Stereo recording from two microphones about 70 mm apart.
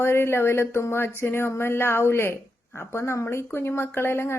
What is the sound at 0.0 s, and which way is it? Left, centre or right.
A woman's voice, left.